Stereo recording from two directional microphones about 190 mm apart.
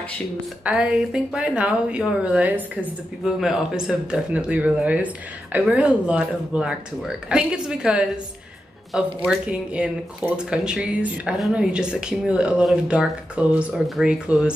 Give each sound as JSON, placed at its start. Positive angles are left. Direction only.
{"t": 0.7, "sound": "speech", "side_deg": -5}